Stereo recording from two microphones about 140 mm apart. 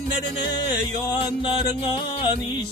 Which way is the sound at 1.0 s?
30° left (ahead or behind).